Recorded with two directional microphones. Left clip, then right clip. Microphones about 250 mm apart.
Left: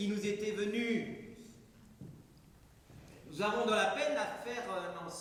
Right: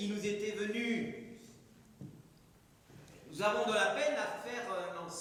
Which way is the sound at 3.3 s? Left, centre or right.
Centre.